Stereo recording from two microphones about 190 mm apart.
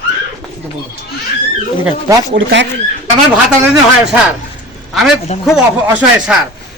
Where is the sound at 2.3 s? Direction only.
70° right (ahead or behind).